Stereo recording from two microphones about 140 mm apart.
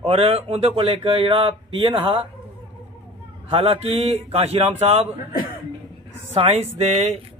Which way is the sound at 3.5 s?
40° right (ahead or behind).